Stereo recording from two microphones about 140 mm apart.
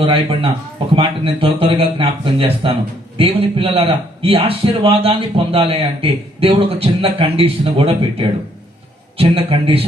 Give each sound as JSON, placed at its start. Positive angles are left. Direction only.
{"t": 0.0, "sound": "a man's voice", "side_deg": -40}
{"t": 9.1, "sound": "a man's voice", "side_deg": -45}